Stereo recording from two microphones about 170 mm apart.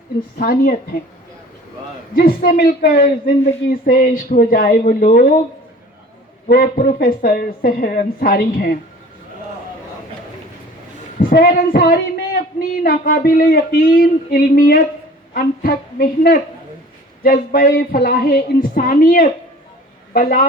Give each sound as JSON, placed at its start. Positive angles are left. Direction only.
{"t": 0.3, "sound": "a woman's voice", "side_deg": 60}
{"t": 2.1, "sound": "a woman's voice", "side_deg": 60}
{"t": 6.5, "sound": "a woman's voice", "side_deg": 60}
{"t": 11.2, "sound": "a woman's voice", "side_deg": 60}